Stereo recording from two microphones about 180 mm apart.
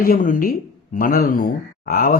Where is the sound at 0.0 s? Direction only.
50° left (ahead or behind).